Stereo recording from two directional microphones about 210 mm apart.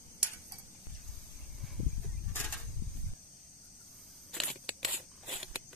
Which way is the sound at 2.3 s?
10° left (ahead or behind).